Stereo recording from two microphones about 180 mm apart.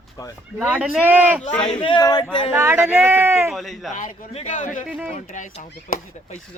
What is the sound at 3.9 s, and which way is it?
Speech, 40° left (ahead or behind).